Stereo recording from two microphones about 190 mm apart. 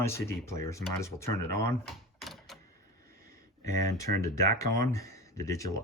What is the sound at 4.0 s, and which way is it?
Speech, 15° left (ahead or behind).